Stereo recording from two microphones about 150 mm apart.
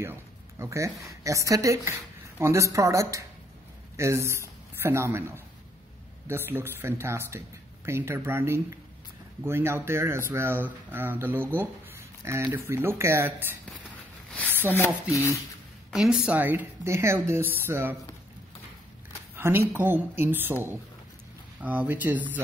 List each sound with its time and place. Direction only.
0.0 s speech: 15° right (ahead or behind)
15.0 s speech: 20° left (ahead or behind)
15.9 s speech: 5° right (ahead or behind)
19.3 s speech: 15° right (ahead or behind)